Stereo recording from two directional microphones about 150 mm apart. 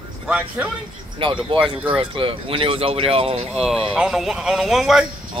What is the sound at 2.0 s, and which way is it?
Speech, 35° right (ahead or behind).